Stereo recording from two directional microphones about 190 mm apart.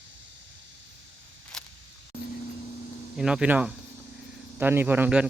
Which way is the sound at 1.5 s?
5° left (ahead or behind).